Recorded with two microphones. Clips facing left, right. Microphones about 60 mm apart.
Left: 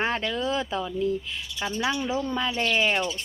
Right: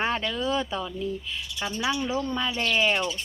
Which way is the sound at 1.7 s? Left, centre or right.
Left.